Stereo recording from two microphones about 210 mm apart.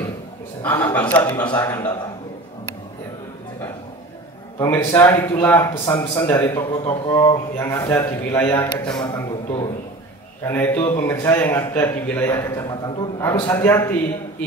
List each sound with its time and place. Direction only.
0.6 s a man's voice: 10° left (ahead or behind)
4.6 s a man's voice: 10° left (ahead or behind)
9.0 s a man's voice: 20° left (ahead or behind)